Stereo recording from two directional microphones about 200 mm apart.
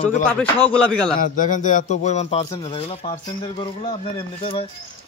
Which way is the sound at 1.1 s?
40° left (ahead or behind).